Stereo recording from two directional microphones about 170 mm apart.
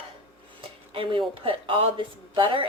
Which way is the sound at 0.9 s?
30° right (ahead or behind).